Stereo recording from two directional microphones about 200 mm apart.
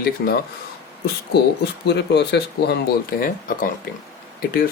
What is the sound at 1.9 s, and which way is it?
Speech, 55° left (ahead or behind).